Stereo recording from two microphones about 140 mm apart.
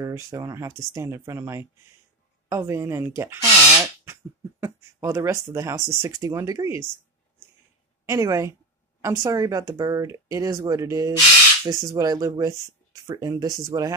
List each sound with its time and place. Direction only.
0.0 s speech: 25° right (ahead or behind)
8.0 s a woman's voice: 20° right (ahead or behind)